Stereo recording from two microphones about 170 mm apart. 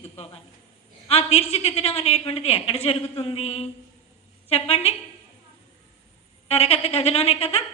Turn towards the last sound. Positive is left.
turn(degrees=35)  # may be behind; listen again after turning